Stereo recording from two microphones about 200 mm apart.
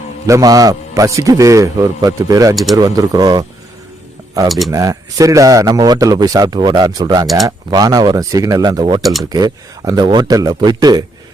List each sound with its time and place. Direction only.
0.3 s a man's voice: 15° right (ahead or behind)
4.7 s a man's voice: 15° right (ahead or behind)